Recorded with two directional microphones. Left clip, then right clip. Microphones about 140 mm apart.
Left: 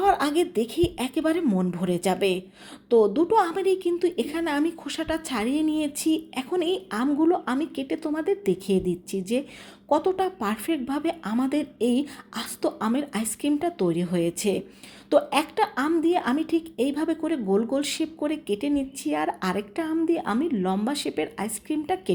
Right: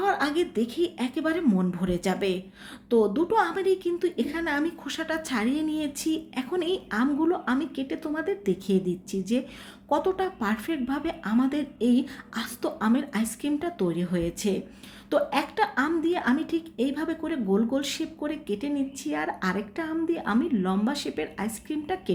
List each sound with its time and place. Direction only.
0.0 s a woman's voice: 35° left (ahead or behind)